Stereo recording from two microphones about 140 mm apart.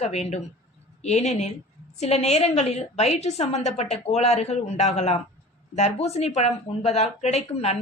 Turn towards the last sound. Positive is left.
turn(degrees=50)  # may be behind; listen again after turning